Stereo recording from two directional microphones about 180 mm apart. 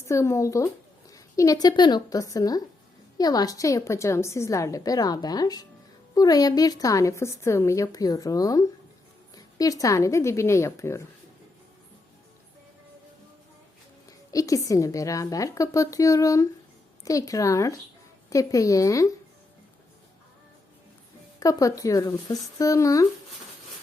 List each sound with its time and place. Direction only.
0.0 s a woman's voice: 15° left (ahead or behind)
14.1 s a woman's voice: 20° left (ahead or behind)
21.3 s a woman's voice: 20° left (ahead or behind)